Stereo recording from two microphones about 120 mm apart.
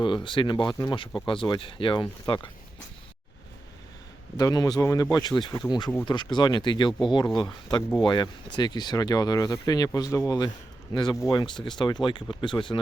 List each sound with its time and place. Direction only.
0.0 s speech: 45° left (ahead or behind)
4.4 s speech: 30° left (ahead or behind)